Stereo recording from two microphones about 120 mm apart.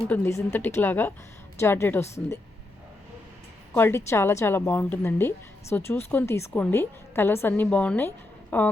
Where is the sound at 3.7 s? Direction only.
20° left (ahead or behind).